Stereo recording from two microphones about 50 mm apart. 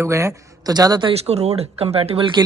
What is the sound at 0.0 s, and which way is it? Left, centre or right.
Speech, right.